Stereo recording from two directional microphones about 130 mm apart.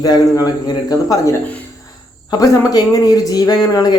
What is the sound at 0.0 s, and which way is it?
Speech, 30° left (ahead or behind).